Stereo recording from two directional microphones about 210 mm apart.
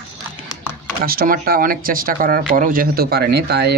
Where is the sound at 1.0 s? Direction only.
45° right (ahead or behind).